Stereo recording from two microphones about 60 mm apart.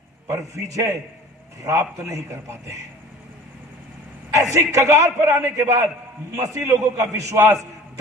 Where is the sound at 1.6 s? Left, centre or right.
Right.